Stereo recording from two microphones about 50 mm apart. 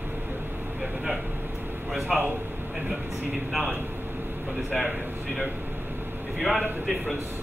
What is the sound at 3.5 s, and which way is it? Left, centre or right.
Speech, centre.